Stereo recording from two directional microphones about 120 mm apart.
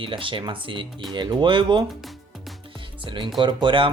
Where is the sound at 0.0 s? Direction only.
45° right (ahead or behind).